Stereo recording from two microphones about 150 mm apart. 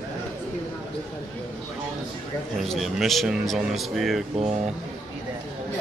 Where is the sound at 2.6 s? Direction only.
Centre (ahead or behind).